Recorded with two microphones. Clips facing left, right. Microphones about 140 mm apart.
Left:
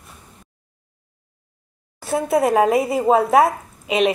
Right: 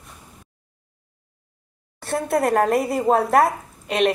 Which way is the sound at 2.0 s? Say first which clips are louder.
Left 3 dB; centre (ahead or behind).